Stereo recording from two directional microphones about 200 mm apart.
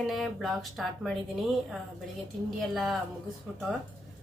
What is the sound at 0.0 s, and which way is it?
Speech, centre (ahead or behind).